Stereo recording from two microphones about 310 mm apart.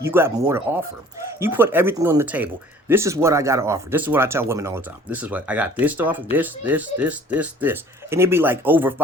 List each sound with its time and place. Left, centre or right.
0.0 s speech: centre